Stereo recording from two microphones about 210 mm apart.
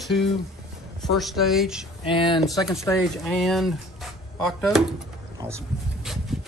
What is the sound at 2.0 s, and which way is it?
Speech, 25° left (ahead or behind).